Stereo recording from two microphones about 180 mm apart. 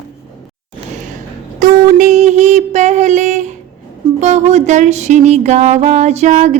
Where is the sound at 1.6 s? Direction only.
40° right (ahead or behind).